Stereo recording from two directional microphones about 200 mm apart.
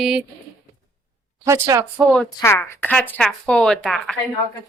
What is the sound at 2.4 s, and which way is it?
A woman's voice, 15° left (ahead or behind).